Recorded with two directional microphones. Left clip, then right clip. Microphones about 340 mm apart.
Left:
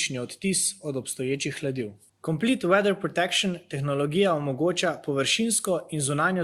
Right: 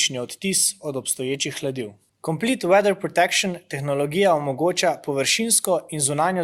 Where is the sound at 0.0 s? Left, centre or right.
Centre.